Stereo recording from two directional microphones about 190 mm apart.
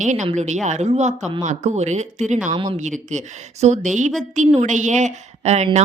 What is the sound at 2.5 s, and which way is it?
Speech, 25° right (ahead or behind).